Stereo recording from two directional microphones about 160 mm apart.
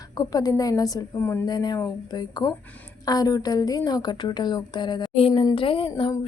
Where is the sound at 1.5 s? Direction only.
25° left (ahead or behind).